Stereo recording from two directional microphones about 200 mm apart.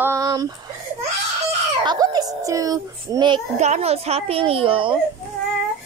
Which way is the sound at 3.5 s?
35° right (ahead or behind).